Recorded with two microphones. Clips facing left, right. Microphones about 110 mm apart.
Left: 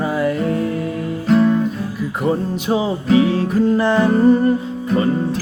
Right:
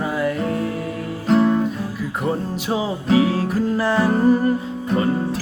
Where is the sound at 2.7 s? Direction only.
5° right (ahead or behind).